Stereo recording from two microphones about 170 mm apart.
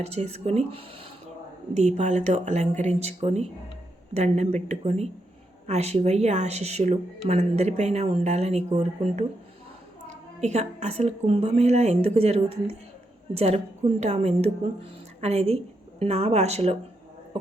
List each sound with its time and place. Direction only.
0.0 s a woman's voice: 40° right (ahead or behind)
10.4 s a woman's voice: 40° right (ahead or behind)